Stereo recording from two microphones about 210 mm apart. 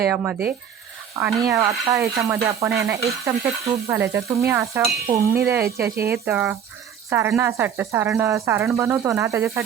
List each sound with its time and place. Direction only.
0.1 s speech: 10° right (ahead or behind)